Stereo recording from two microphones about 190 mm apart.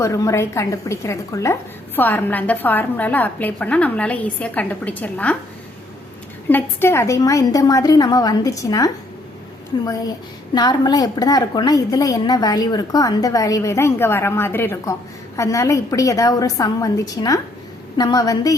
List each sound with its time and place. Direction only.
0.0 s a woman's voice: 15° left (ahead or behind)
6.5 s a woman's voice: 10° left (ahead or behind)